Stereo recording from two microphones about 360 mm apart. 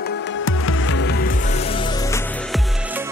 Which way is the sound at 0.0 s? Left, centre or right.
Left.